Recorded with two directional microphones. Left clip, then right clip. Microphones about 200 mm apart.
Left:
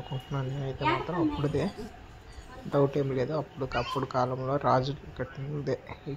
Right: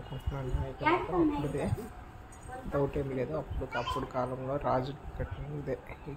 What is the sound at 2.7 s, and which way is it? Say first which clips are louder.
Speech: left 6 dB; 25° left (ahead or behind).